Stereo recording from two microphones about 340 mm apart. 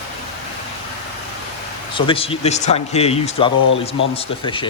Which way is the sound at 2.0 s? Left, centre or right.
Centre.